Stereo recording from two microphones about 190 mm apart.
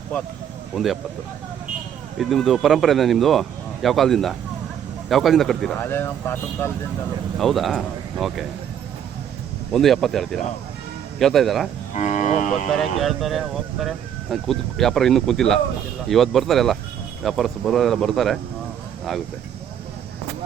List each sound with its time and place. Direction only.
2.1 s speech: centre (ahead or behind)
5.8 s speech: 10° left (ahead or behind)
7.3 s speech: centre (ahead or behind)
9.7 s speech: centre (ahead or behind)
11.9 s speech: 40° left (ahead or behind)
12.7 s speech: centre (ahead or behind)